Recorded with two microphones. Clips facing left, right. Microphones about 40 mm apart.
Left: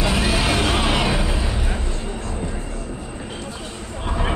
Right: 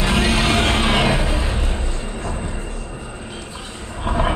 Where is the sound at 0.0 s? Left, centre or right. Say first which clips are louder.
Right 2 dB; right.